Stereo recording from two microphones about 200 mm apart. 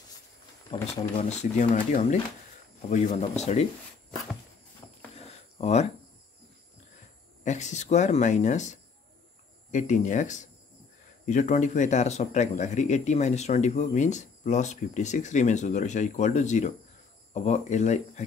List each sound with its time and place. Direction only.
0.7 s speech: 35° left (ahead or behind)
5.1 s a sound: 35° left (ahead or behind)
7.4 s speech: 35° left (ahead or behind)